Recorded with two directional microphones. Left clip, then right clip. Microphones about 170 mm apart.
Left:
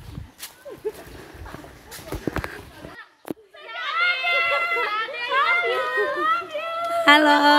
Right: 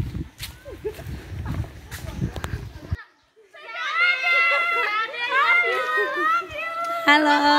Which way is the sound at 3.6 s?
5° left (ahead or behind).